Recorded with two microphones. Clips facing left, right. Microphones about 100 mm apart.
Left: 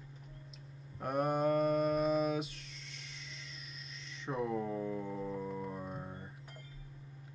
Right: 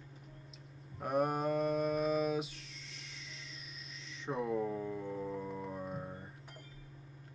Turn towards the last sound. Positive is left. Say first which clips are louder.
# right 1 dB
turn(degrees=0)  # may be behind; listen again after turning